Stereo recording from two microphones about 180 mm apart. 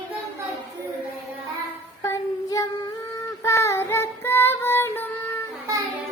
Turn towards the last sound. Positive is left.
turn(degrees=-20)  # may be behind; listen again after turning